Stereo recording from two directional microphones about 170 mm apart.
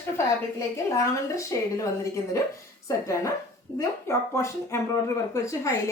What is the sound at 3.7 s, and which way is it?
Speech, 15° left (ahead or behind).